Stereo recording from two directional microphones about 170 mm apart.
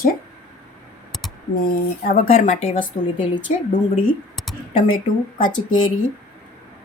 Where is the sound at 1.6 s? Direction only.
55° left (ahead or behind).